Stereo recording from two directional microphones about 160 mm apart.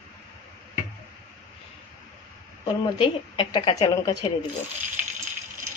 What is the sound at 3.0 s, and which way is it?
Speech, 30° left (ahead or behind).